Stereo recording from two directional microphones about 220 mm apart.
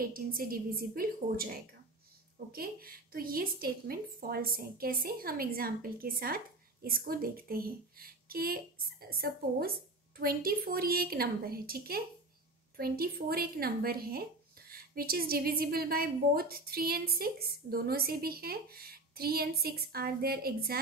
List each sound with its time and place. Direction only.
0.0 s a woman's voice: 40° right (ahead or behind)